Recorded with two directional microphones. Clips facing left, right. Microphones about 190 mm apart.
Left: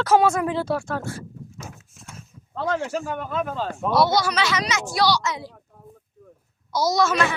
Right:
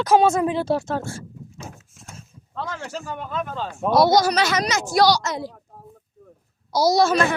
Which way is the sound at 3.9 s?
40° right (ahead or behind).